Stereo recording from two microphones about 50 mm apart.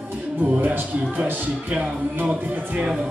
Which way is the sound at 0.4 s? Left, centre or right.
Right.